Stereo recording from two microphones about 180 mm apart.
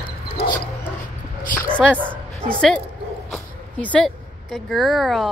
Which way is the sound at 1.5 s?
50° left (ahead or behind).